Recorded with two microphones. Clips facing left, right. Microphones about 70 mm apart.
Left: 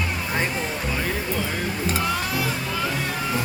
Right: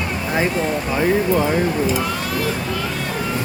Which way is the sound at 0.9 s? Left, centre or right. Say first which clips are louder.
Right 12 dB; right.